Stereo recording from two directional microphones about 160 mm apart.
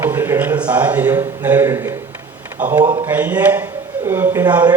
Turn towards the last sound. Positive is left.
turn(degrees=-10)  # may be behind; listen again after turning